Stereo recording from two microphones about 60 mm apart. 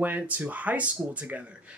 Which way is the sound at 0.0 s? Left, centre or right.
Right.